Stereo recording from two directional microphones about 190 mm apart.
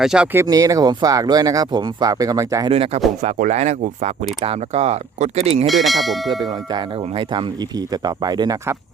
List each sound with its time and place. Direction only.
0.0 s bell: 5° right (ahead or behind)
0.4 s speech: 15° right (ahead or behind)
2.7 s speech: 30° right (ahead or behind)
5.6 s bell: centre (ahead or behind)
6.4 s speech: 25° right (ahead or behind)